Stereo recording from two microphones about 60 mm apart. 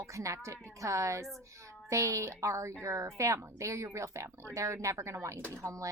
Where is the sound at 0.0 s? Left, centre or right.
Right.